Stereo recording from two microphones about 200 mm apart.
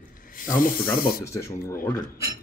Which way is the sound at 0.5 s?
45° left (ahead or behind).